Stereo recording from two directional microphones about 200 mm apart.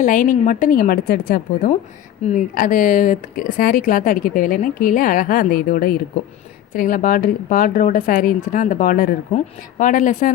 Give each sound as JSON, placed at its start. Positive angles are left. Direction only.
{"t": 0.0, "sound": "speech", "side_deg": 40}